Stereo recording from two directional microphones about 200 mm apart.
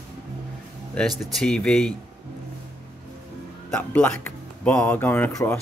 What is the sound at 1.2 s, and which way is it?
Speech, centre (ahead or behind).